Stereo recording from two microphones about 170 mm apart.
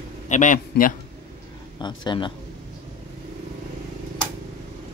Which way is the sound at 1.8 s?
25° left (ahead or behind).